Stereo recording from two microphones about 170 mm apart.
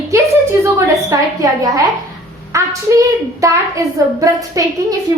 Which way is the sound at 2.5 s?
20° right (ahead or behind).